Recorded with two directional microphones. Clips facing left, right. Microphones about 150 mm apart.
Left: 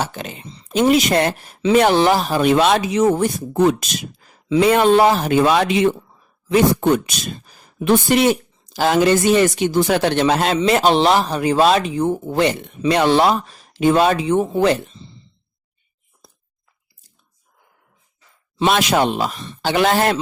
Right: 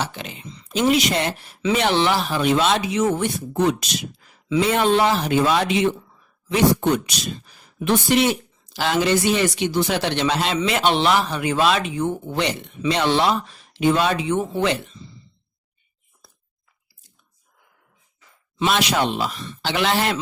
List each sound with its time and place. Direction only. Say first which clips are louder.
0.0 s speech: left 3 dB; 45° left (ahead or behind)
4.6 s speech: left 6 dB; 55° left (ahead or behind); by 12.4 s 35° left (ahead or behind)
12.4 s speech: left 6 dB; 50° left (ahead or behind); by 15.1 s 30° left (ahead or behind)
16.2 s chewing: left 4 dB; 20° left (ahead or behind)
18.7 s speech: left 4 dB; 50° left (ahead or behind)